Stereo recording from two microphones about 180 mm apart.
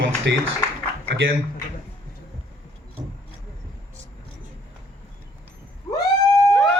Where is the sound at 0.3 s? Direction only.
80° right.